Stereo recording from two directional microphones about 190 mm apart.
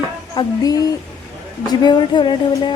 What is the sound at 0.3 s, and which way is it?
Speech, 20° left (ahead or behind).